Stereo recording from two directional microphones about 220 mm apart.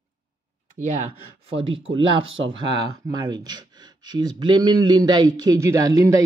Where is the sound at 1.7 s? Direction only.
60° right (ahead or behind).